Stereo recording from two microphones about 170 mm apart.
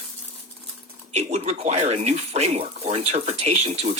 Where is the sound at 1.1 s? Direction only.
40° right (ahead or behind).